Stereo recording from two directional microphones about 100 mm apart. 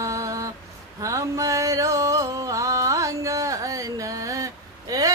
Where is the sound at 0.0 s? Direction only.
30° right (ahead or behind).